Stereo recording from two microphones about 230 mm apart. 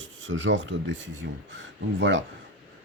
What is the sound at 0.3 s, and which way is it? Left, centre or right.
Speech, right.